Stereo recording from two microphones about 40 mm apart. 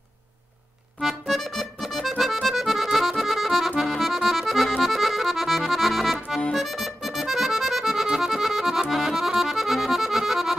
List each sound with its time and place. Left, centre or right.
1.0 s accordion: centre